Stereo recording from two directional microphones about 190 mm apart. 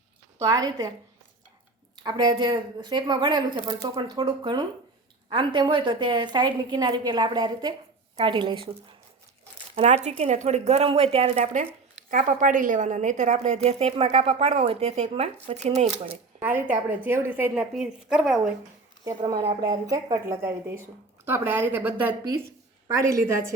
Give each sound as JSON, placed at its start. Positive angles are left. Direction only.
{"t": 0.3, "sound": "a woman's voice", "side_deg": -20}
{"t": 2.0, "sound": "a woman's voice", "side_deg": -20}
{"t": 9.7, "sound": "a woman's voice", "side_deg": -35}
{"t": 16.4, "sound": "a woman's voice", "side_deg": -10}
{"t": 19.0, "sound": "a woman's voice", "side_deg": -20}